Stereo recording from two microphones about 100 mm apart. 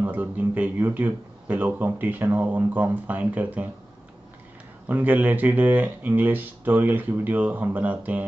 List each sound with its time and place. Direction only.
0.0 s a man's voice: 20° right (ahead or behind)
4.8 s a man's voice: 15° right (ahead or behind)